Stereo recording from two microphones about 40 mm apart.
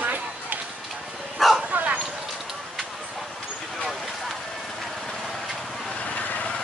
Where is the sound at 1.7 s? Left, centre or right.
Right.